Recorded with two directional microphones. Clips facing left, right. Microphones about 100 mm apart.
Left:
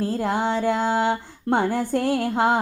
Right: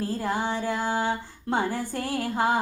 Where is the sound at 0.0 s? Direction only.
65° left (ahead or behind).